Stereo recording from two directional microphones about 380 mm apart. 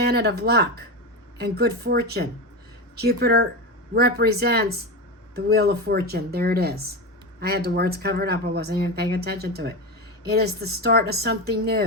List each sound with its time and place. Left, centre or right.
0.0 s speech: right